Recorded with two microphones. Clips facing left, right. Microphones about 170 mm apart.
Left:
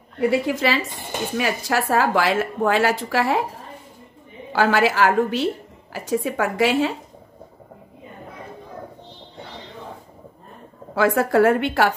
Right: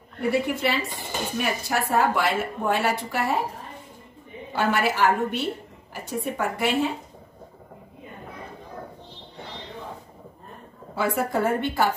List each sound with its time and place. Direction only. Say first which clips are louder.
0.3 s a woman's voice: left 1 dB; 90° left
4.5 s a woman's voice: left 5 dB; 90° left
11.0 s a woman's voice: left 7 dB; 90° left